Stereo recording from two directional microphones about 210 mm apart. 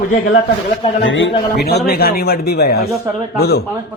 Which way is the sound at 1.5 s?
50° left (ahead or behind).